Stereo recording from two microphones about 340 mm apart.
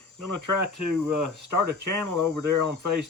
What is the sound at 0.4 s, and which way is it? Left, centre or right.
Speech, right.